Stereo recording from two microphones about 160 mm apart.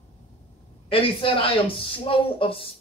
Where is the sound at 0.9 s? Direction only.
35° left (ahead or behind).